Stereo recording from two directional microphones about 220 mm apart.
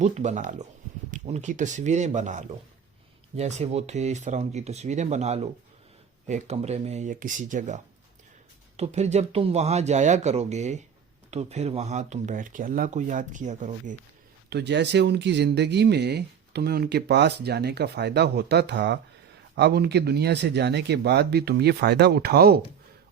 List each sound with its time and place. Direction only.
0.0 s speech: 30° right (ahead or behind)
14.5 s speech: 50° right (ahead or behind)